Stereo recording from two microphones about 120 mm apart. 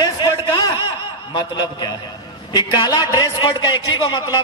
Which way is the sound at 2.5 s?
35° left (ahead or behind).